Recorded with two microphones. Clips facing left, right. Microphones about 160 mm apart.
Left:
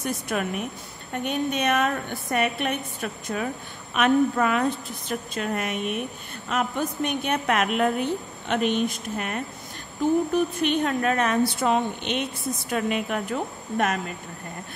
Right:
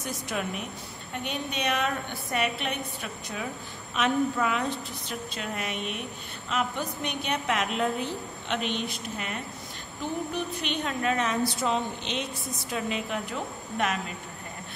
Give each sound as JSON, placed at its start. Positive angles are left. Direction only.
{"t": 0.0, "sound": "a woman's voice", "side_deg": 55}